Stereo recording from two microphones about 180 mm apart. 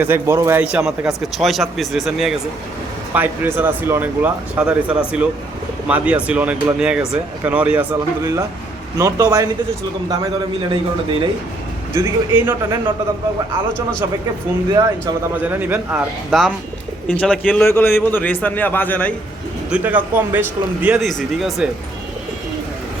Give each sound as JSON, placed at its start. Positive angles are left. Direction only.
{"t": 0.0, "sound": "a man's voice", "side_deg": -15}
{"t": 11.9, "sound": "speech", "side_deg": -15}
{"t": 14.7, "sound": "speech", "side_deg": -20}
{"t": 17.7, "sound": "a man's voice", "side_deg": 15}
{"t": 19.7, "sound": "speech", "side_deg": -10}